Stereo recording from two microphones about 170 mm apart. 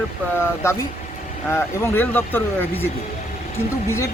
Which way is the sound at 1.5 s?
15° left (ahead or behind).